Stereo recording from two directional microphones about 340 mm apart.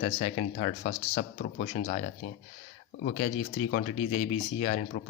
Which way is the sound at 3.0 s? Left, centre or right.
Centre.